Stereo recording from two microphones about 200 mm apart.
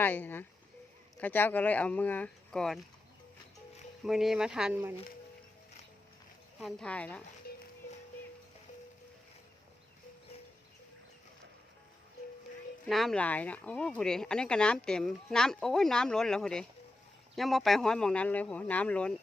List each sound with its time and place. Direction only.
0.0 s speech: 10° left (ahead or behind)
4.0 s speech: centre (ahead or behind)
6.6 s speech: centre (ahead or behind)
7.5 s music: 50° left (ahead or behind)
12.9 s speech: centre (ahead or behind)